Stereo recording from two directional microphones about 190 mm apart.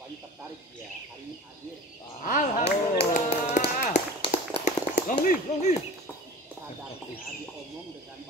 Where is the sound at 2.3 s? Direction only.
45° left (ahead or behind).